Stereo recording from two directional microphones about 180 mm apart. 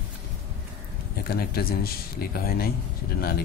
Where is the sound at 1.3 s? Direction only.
60° left (ahead or behind).